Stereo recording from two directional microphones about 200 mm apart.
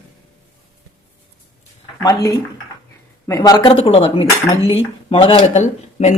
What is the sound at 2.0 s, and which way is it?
Speech, 15° left (ahead or behind).